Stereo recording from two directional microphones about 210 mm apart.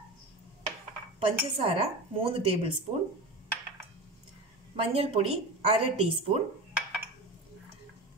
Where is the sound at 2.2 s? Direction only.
25° right (ahead or behind).